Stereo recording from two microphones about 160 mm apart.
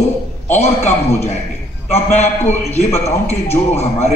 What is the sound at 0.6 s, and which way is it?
A man's voice, 40° left (ahead or behind).